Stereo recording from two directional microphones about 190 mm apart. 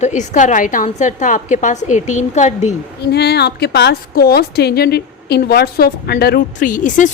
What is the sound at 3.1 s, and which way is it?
A woman's voice, 60° left (ahead or behind).